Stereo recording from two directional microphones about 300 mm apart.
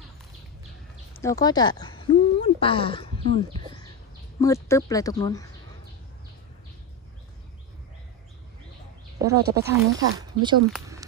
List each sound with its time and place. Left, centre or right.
1.1 s speech: centre
9.2 s speech: centre